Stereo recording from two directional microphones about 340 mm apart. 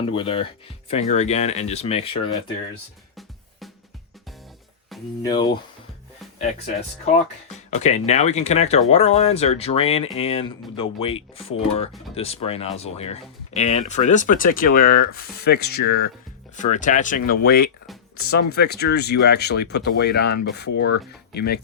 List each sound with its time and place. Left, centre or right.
0.1 s speech: centre
5.2 s speech: centre; by 21.6 s left